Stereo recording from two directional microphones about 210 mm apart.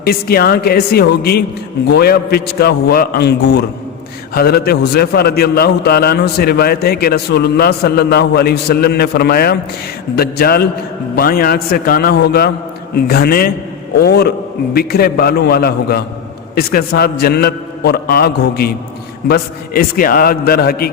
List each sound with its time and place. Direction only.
0.0 s a man's voice: 45° left (ahead or behind)